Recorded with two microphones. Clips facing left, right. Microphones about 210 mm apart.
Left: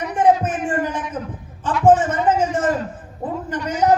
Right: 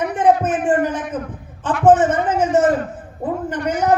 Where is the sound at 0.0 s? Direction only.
60° right (ahead or behind).